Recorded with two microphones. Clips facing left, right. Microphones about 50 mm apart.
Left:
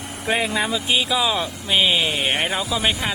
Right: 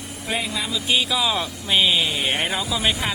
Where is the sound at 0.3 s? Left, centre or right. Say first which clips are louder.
Left 5 dB; left.